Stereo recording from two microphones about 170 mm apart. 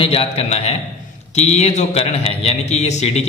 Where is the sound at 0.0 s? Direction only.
35° left (ahead or behind).